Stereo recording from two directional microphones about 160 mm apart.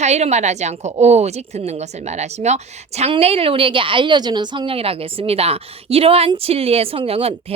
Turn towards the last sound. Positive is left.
turn(degrees=-35)  # may be behind; listen again after turning